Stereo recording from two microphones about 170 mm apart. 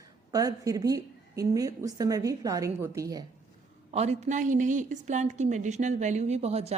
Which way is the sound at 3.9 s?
40° right (ahead or behind).